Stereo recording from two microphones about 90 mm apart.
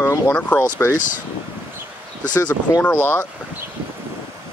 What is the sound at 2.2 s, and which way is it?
Speech, 45° left (ahead or behind).